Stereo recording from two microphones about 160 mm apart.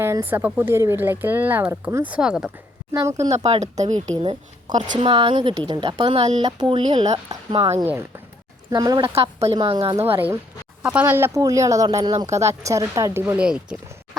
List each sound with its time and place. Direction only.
0.0 s speech: 15° right (ahead or behind)
2.9 s speech: 20° right (ahead or behind)
3.2 s speech: 40° right (ahead or behind)
4.2 s a woman's voice: 35° right (ahead or behind)
6.4 s a woman's voice: 30° right (ahead or behind)
9.0 s a woman's voice: 35° right (ahead or behind)
9.9 s speech: 15° right (ahead or behind)